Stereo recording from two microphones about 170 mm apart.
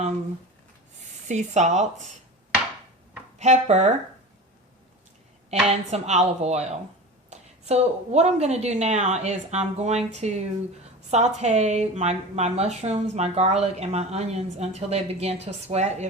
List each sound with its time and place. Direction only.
1.3 s speech: 45° right (ahead or behind)
3.3 s speech: 40° right (ahead or behind)
5.5 s a woman's voice: 40° right (ahead or behind)